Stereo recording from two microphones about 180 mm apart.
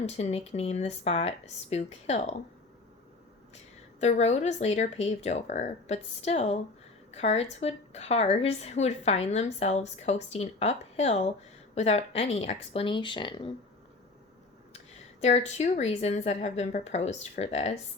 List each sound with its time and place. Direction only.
0.0 s a woman's voice: 35° left (ahead or behind)
4.0 s a woman's voice: 40° left (ahead or behind)
15.2 s a woman's voice: 40° left (ahead or behind)